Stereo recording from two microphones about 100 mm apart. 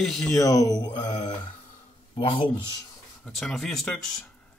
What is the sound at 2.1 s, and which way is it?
Speech, 60° left (ahead or behind).